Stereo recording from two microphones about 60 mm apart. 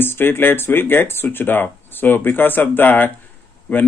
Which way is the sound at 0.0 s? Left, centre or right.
Left.